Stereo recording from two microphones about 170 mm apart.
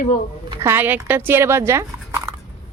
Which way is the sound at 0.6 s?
15° right (ahead or behind).